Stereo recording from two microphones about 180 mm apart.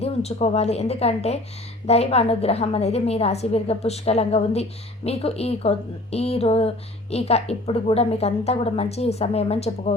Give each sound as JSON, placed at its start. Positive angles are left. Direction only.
{"t": 0.0, "sound": "a woman's voice", "side_deg": 35}